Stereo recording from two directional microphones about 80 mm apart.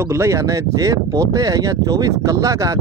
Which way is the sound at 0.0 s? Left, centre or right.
Right.